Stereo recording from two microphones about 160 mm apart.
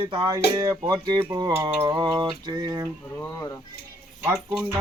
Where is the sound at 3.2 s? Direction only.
20° left (ahead or behind).